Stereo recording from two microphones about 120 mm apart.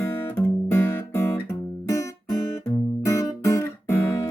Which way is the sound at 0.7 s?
20° left (ahead or behind).